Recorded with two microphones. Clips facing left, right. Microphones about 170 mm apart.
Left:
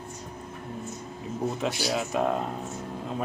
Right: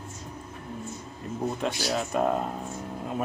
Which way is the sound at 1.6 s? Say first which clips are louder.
Even; 5° left (ahead or behind).